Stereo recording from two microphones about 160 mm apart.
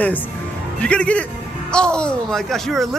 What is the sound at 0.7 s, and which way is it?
A woman's voice, 5° left (ahead or behind).